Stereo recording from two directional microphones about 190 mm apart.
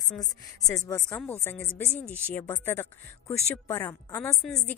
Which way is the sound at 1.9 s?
10° right (ahead or behind).